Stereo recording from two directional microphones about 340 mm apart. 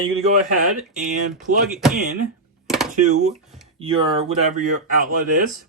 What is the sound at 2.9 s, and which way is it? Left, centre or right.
Speech, right.